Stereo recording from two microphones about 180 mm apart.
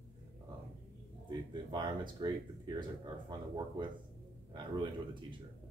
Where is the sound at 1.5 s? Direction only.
25° right (ahead or behind).